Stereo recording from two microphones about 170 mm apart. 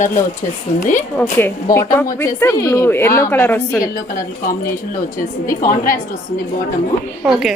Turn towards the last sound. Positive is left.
turn(degrees=0)  # may be behind; listen again after turning